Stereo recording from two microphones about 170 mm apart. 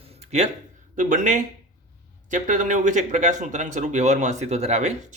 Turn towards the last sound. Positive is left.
turn(degrees=-40)  # may be behind; listen again after turning